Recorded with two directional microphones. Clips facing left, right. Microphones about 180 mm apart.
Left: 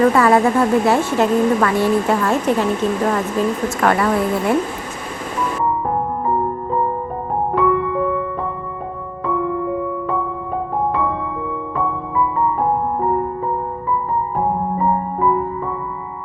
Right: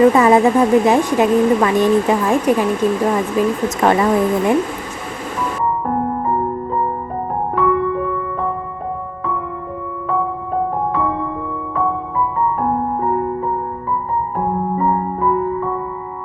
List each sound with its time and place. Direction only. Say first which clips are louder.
0.0 s speech: right 3 dB; 15° right (ahead or behind)